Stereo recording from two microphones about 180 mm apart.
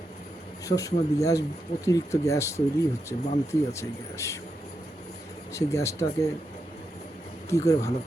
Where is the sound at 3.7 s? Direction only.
15° left (ahead or behind).